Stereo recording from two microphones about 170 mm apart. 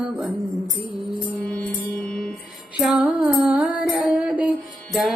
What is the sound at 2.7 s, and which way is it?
Music, 10° right (ahead or behind).